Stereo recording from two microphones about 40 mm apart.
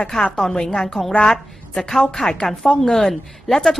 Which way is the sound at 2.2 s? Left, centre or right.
Centre.